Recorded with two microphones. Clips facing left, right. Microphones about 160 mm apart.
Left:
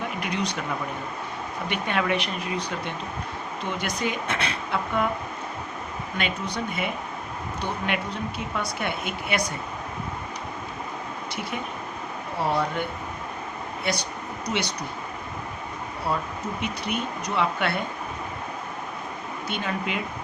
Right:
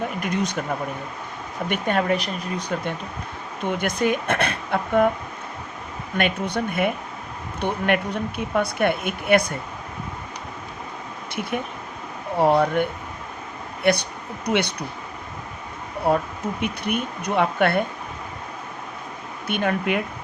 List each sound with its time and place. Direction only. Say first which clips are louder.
0.2 s speech: right 3 dB; 50° right (ahead or behind)
1.7 s speech: right 4 dB; 40° right (ahead or behind)
6.1 s speech: right 6 dB; 55° right (ahead or behind)
12.4 s speech: right 7 dB; 55° right (ahead or behind)
13.8 s speech: right 9 dB; 55° right (ahead or behind)
16.1 s speech: right 7 dB; 55° right (ahead or behind)
19.5 s speech: right 7 dB; 55° right (ahead or behind)